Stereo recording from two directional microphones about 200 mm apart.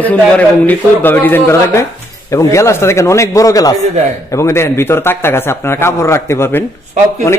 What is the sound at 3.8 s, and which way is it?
Speech, 35° right (ahead or behind).